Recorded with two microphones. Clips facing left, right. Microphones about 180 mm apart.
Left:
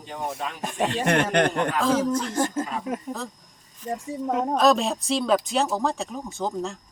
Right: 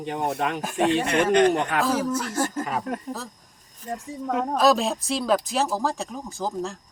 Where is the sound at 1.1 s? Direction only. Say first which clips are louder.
Right 1 dB; 60° left (ahead or behind).